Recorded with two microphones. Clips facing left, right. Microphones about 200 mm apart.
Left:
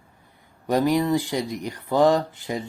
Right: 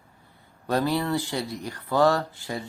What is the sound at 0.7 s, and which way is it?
Speech, 15° left (ahead or behind).